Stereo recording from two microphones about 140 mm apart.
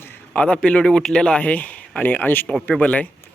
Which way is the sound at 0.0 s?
10° left (ahead or behind).